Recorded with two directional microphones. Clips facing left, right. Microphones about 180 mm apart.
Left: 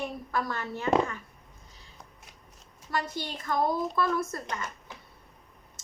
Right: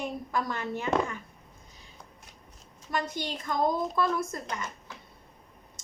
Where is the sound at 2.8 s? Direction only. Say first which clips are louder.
Right 1 dB; 20° right (ahead or behind).